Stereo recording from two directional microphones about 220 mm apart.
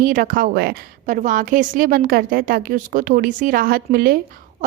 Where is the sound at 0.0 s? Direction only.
40° right (ahead or behind).